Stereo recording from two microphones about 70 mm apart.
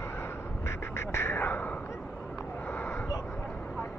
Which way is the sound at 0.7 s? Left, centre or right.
Left.